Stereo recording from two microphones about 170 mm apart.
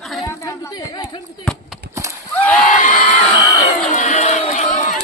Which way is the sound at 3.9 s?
45° left (ahead or behind).